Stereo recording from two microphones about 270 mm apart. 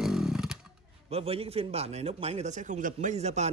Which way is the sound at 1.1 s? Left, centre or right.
Right.